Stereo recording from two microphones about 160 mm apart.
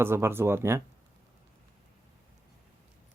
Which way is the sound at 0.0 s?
15° right (ahead or behind).